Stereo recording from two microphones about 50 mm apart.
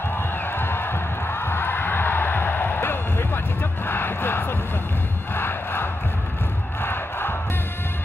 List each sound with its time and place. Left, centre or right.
0.5 s a sound: left
3.8 s music: left
6.8 s crowd: left